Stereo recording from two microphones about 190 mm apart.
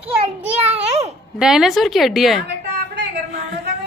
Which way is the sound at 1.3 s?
Centre (ahead or behind).